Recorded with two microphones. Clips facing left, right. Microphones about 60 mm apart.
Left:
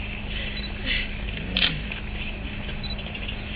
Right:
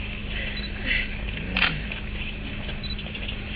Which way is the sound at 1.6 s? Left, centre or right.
Right.